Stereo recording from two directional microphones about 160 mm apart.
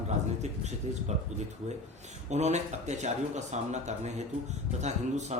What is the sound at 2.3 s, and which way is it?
A man's voice, 45° right (ahead or behind).